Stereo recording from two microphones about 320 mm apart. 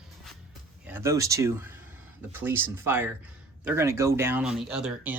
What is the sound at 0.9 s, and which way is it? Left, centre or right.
Speech, centre.